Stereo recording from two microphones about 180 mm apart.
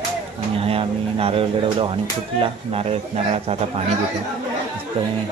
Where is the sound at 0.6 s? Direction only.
30° right (ahead or behind).